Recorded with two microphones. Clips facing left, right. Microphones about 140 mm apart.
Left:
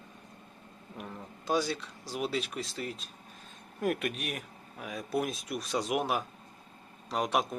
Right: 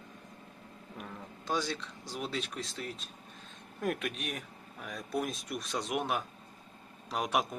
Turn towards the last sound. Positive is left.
turn(degrees=0)  # may be behind; listen again after turning